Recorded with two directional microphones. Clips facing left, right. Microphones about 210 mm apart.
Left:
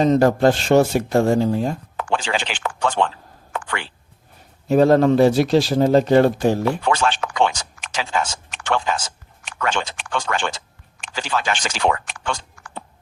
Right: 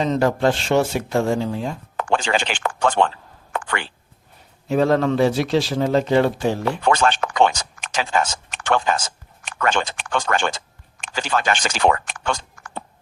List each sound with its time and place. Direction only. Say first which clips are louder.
0.0 s a man's voice: left 4 dB; 40° left (ahead or behind)
2.0 s speech: right 4 dB; 45° right (ahead or behind)
3.5 s a sound: right 2 dB; 50° right (ahead or behind)
4.7 s a man's voice: left 4 dB; 40° left (ahead or behind)
6.8 s speech: right 2 dB; 50° right (ahead or behind)